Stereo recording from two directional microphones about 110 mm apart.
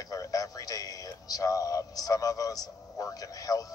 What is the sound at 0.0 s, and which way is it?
Music, 35° left (ahead or behind).